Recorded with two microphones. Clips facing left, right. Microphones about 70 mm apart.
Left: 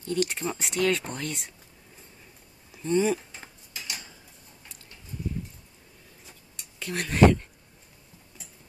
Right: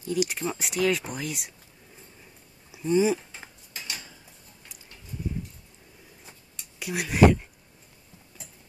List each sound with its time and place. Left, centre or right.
0.0 s speech: centre
2.7 s speech: centre
3.7 s a sound: right
6.8 s speech: centre